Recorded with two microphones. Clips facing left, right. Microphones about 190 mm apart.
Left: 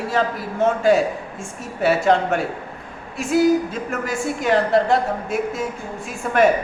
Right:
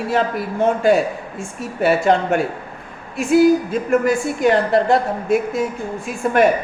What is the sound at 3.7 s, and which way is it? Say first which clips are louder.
Speech: right 9 dB; 55° right (ahead or behind).